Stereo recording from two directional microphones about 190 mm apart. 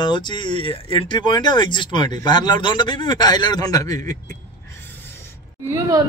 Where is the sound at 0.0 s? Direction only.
25° left (ahead or behind).